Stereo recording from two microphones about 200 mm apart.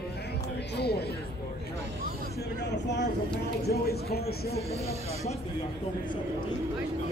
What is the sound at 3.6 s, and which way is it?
Speech, 50° left (ahead or behind).